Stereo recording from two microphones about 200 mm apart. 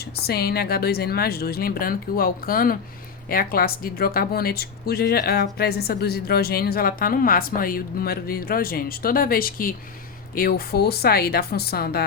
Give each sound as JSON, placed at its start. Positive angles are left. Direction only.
{"t": 0.3, "sound": "speech", "side_deg": 50}